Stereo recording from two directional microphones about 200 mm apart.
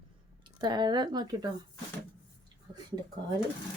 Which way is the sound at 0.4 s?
20° right (ahead or behind).